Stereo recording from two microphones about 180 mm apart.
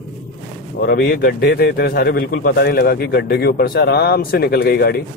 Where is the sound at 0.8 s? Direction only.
55° left (ahead or behind).